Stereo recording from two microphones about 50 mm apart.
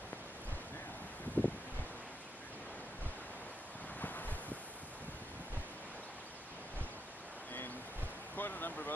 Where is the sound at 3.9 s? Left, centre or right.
Left.